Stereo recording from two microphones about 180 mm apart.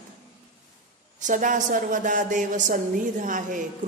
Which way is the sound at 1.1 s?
45° right (ahead or behind).